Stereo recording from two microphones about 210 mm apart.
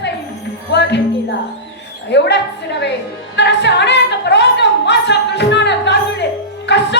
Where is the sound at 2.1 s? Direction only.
55° left (ahead or behind).